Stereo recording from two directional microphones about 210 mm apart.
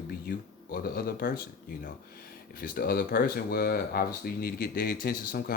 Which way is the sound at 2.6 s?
45° left (ahead or behind).